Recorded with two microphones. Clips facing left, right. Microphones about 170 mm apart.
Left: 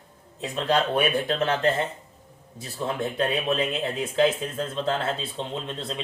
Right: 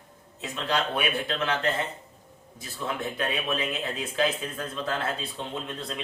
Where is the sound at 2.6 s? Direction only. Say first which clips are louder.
Left 4 dB; 30° left (ahead or behind).